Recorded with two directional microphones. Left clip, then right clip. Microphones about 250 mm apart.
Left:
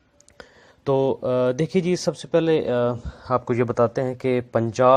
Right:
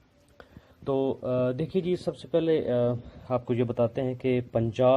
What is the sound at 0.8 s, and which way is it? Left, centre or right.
Speech, left.